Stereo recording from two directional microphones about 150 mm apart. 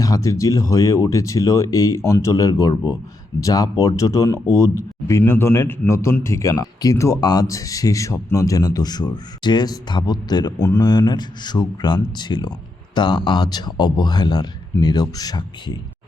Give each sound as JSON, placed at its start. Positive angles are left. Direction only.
{"t": 0.0, "sound": "a man's voice", "side_deg": 20}